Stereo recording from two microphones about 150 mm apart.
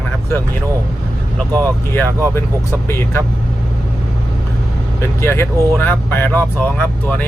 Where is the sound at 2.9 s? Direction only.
15° left (ahead or behind).